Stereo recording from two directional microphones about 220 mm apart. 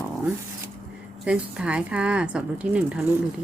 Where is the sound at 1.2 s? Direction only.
5° right (ahead or behind).